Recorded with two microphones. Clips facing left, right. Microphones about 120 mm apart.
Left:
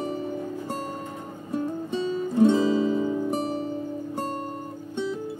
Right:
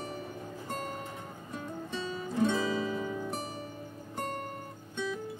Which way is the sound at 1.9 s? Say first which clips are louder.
Left 8 dB; 25° left (ahead or behind).